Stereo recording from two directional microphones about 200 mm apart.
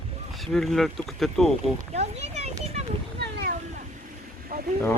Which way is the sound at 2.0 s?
35° right (ahead or behind).